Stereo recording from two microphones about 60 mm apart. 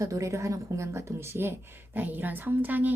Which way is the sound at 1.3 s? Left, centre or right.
Right.